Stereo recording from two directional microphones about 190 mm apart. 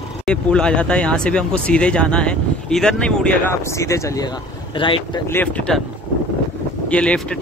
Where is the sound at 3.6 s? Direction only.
15° left (ahead or behind).